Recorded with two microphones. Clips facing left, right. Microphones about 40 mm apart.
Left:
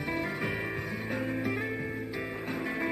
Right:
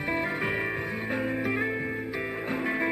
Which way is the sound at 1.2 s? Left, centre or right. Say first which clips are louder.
Right 4 dB; centre.